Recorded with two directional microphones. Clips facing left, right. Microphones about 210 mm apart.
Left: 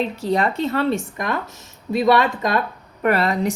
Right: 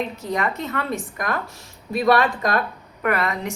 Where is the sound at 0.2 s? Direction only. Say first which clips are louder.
Left 5 dB; 30° left (ahead or behind).